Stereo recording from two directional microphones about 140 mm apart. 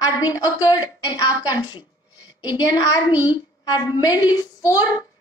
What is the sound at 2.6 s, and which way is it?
Speech, 30° left (ahead or behind).